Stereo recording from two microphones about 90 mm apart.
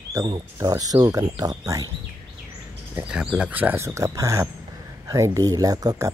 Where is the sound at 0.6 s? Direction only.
40° right (ahead or behind).